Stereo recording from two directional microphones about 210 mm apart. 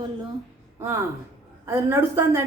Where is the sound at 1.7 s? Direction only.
10° right (ahead or behind).